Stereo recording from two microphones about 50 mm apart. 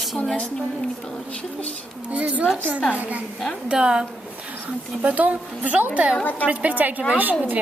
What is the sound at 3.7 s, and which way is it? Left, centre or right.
Speech, centre.